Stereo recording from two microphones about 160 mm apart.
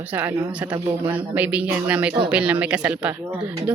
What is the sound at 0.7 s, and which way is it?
Speech, 25° right (ahead or behind).